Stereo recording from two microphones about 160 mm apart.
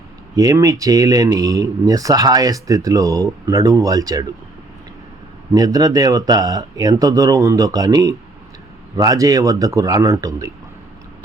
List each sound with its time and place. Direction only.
0.3 s speech: 20° right (ahead or behind)
5.5 s speech: 25° right (ahead or behind)